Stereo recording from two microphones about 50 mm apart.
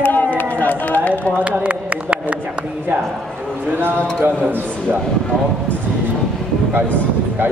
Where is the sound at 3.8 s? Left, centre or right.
Right.